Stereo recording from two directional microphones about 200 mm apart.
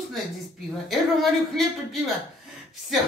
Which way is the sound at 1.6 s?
Centre (ahead or behind).